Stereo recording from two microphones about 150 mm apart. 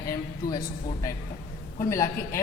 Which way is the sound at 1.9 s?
20° left (ahead or behind).